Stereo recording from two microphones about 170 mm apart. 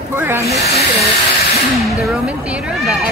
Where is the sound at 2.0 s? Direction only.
5° right (ahead or behind).